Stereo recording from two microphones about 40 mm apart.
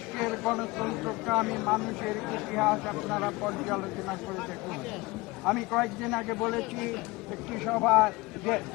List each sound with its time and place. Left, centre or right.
0.2 s speech: centre